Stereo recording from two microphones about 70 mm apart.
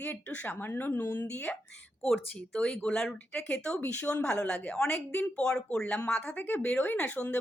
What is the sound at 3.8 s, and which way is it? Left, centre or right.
Speech, left.